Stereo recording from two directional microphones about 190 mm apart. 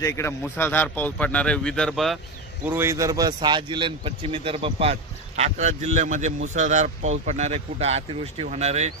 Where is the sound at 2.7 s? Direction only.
15° right (ahead or behind).